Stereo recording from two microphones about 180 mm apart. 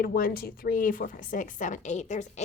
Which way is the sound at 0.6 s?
50° left (ahead or behind).